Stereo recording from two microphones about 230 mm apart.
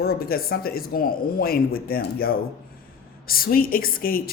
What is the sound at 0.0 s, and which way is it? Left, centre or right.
A woman's voice, left.